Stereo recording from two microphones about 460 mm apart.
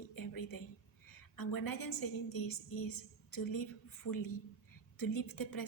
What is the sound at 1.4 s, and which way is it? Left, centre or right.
A woman's voice, left.